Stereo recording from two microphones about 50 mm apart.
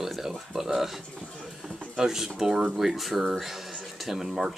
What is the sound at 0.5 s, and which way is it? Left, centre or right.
Speech, centre.